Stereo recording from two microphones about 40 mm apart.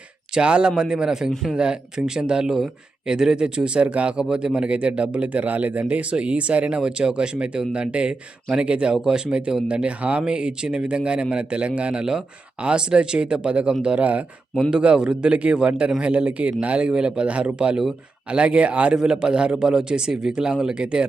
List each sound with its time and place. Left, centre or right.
0.3 s speech: right
14.7 s speech: right
18.9 s speech: centre